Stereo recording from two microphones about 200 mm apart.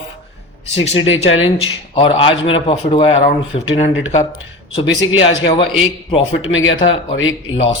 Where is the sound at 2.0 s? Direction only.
25° left (ahead or behind).